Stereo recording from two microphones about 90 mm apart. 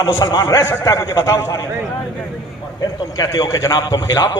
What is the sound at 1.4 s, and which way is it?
Speech, 30° left (ahead or behind).